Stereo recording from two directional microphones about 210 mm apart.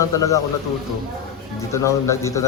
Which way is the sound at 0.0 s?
15° left (ahead or behind).